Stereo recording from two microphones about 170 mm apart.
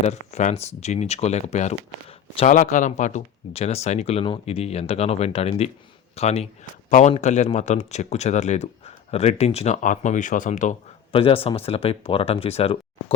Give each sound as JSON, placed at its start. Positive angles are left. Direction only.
{"t": 0.1, "sound": "speech", "side_deg": 40}
{"t": 2.5, "sound": "speech", "side_deg": 45}